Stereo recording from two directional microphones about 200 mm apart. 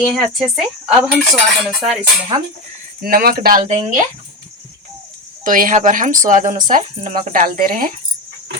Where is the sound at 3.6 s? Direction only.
30° right (ahead or behind).